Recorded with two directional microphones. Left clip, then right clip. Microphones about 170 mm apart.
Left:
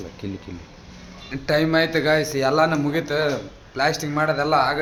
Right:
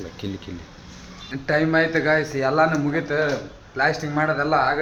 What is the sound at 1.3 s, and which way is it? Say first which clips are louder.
A man's voice: even; 20° left (ahead or behind).